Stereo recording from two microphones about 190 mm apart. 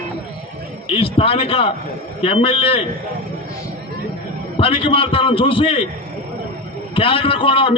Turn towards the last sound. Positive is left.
turn(degrees=30)  # may be behind; listen again after turning